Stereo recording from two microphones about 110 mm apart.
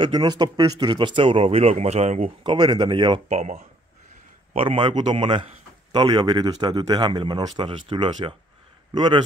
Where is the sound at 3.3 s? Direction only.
80° right.